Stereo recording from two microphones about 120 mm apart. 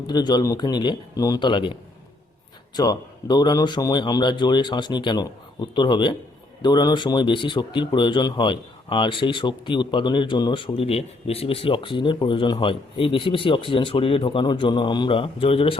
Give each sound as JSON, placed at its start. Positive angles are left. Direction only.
{"t": 0.1, "sound": "a man's voice", "side_deg": 35}